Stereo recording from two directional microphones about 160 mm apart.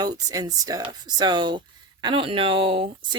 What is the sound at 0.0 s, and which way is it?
Speech, 25° right (ahead or behind).